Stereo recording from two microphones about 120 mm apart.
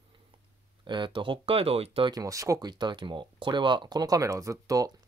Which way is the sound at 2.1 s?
30° right (ahead or behind).